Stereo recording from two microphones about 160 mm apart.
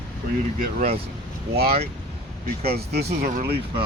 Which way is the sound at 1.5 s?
75° right (ahead or behind).